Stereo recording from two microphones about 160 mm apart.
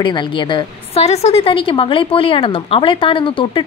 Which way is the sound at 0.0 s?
30° left (ahead or behind).